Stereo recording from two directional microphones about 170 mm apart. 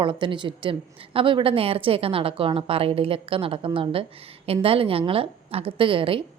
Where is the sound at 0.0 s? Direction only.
30° right (ahead or behind).